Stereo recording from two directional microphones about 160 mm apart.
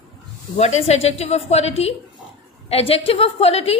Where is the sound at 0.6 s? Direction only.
45° left (ahead or behind).